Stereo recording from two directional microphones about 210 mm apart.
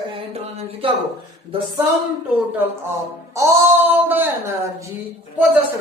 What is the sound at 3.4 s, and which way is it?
A woman's voice, 10° right (ahead or behind).